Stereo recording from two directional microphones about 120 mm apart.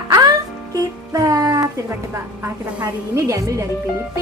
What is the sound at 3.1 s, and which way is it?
Speech, 25° right (ahead or behind).